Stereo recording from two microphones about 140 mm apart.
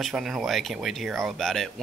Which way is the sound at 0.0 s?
Centre (ahead or behind).